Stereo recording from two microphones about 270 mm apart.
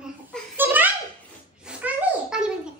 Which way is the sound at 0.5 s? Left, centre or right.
Centre.